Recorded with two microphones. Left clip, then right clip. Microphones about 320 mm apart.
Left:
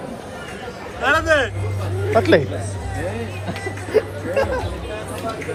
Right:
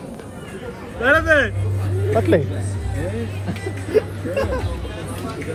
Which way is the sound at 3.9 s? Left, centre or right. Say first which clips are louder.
Even; left.